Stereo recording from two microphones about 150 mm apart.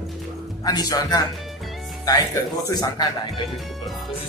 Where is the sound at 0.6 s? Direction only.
25° left (ahead or behind).